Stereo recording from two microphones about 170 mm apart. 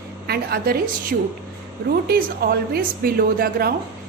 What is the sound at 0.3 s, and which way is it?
Speech, 65° right (ahead or behind).